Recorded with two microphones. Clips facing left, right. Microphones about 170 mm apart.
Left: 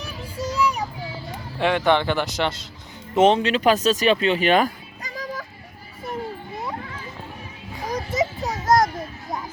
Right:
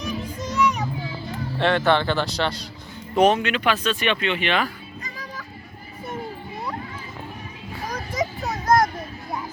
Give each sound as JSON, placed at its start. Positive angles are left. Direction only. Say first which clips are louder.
{"t": 0.4, "sound": "children playing", "louder": "even", "side_deg": 30}
{"t": 1.5, "sound": "speech", "louder": "even", "side_deg": 10}
{"t": 8.1, "sound": "a sound", "louder": "left 1 dB", "side_deg": 20}